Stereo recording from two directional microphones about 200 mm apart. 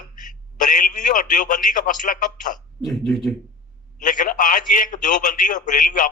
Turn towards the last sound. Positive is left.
turn(degrees=40)  # may be behind; listen again after turning